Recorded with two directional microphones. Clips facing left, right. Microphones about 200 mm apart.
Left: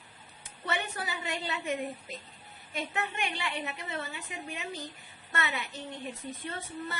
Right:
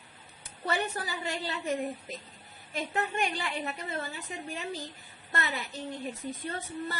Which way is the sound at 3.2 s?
35° right (ahead or behind).